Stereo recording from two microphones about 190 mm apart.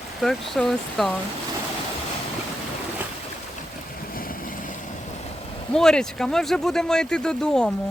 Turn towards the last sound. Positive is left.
turn(degrees=5)  # may be behind; listen again after turning